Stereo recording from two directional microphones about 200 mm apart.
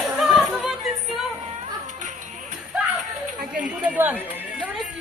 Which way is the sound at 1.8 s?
40° right (ahead or behind).